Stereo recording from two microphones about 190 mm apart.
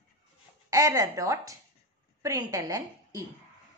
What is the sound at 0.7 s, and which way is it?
A woman's voice, 20° right (ahead or behind).